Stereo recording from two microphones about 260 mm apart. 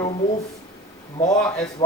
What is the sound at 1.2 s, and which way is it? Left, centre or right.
Speech, centre.